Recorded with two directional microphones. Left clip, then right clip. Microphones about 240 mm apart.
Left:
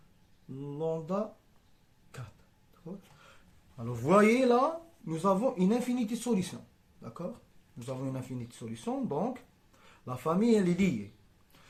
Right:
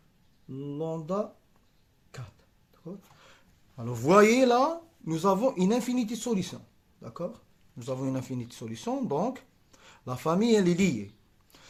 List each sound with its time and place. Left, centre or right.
0.7 s speech: right
2.8 s a sound: right
3.8 s speech: right